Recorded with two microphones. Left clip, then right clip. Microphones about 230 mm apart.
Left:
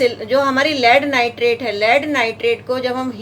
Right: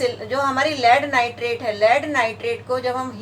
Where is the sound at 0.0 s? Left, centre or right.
Left.